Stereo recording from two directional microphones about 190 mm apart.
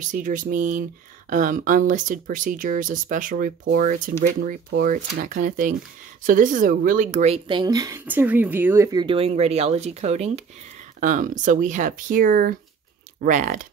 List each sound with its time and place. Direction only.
0.0 s speech: 45° right (ahead or behind)
7.4 s speech: 20° right (ahead or behind)
9.0 s speech: 30° right (ahead or behind)